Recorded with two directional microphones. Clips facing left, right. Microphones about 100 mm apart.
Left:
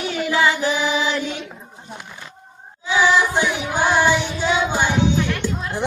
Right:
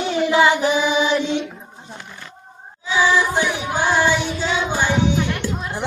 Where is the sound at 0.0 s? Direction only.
25° right (ahead or behind).